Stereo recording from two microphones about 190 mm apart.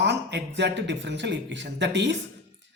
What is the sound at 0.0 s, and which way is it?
Speech, 65° right (ahead or behind).